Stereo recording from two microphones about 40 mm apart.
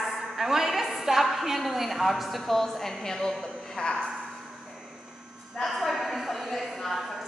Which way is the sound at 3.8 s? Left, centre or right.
Left.